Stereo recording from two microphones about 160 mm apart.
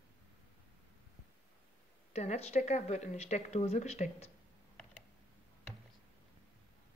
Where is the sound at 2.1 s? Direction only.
45° left (ahead or behind).